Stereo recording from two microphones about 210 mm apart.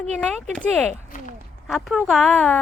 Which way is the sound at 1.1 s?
35° left (ahead or behind).